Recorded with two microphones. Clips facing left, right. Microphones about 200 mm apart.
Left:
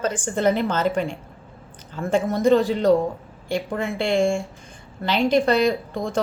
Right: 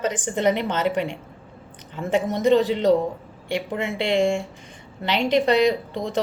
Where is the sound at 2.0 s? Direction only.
20° right (ahead or behind).